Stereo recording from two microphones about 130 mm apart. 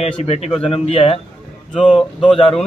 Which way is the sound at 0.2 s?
55° left (ahead or behind).